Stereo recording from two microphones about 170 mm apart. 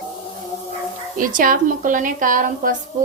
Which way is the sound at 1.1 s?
55° right (ahead or behind).